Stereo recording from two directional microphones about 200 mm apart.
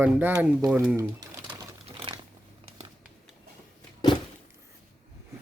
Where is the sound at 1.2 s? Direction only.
20° right (ahead or behind).